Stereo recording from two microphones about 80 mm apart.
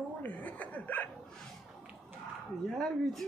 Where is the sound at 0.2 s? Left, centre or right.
Centre.